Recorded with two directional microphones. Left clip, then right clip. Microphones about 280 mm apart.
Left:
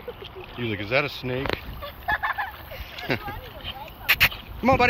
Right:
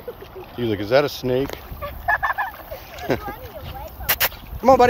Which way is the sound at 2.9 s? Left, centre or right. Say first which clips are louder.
Right 4 dB; centre.